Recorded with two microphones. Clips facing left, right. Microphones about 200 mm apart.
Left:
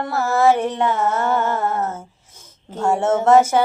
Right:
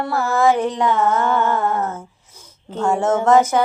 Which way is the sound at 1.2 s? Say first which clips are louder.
Right 1 dB; 45° left (ahead or behind).